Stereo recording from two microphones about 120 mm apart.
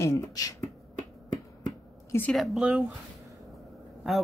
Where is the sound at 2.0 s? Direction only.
20° left (ahead or behind).